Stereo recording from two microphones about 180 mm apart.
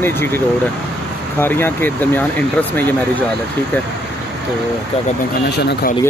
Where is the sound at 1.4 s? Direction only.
10° left (ahead or behind).